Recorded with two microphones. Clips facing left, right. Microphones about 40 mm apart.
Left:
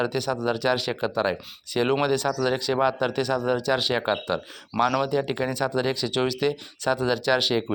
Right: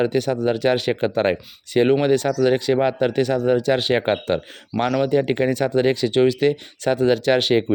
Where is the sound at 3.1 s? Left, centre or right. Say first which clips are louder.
Right 6 dB; right.